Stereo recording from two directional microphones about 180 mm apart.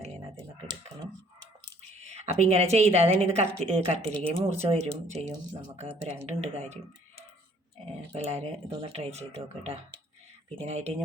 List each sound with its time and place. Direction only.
2.0 s speech: 40° right (ahead or behind)
7.9 s speech: 35° right (ahead or behind)